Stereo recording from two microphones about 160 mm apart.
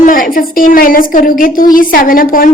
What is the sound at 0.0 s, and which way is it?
A woman's voice, 60° left (ahead or behind).